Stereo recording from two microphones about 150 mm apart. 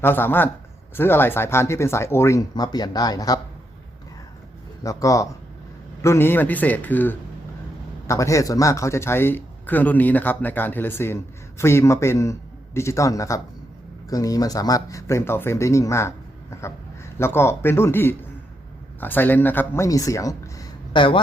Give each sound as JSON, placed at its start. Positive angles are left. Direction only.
{"t": 0.0, "sound": "speech", "side_deg": 15}
{"t": 4.8, "sound": "a man's voice", "side_deg": 20}